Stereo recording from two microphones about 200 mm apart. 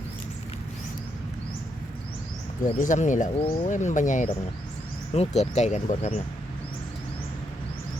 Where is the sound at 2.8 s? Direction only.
40° left (ahead or behind).